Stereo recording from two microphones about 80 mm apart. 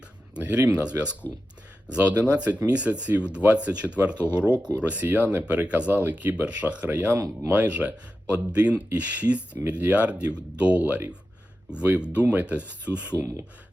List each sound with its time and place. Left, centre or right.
0.3 s speech: centre